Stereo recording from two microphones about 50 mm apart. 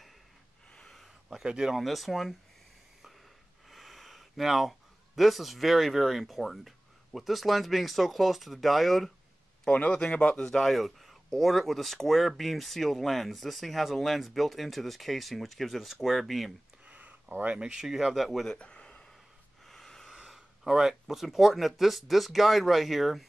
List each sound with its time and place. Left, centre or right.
0.7 s a sound: centre
1.4 s speech: centre
1.8 s speech: centre
3.7 s speech: centre
9.7 s speech: left
10.3 s speech: centre
16.8 s a sound: right
17.6 s speech: centre
17.8 s speech: centre
18.6 s a sound: left
19.6 s snort: centre
20.2 s speech: centre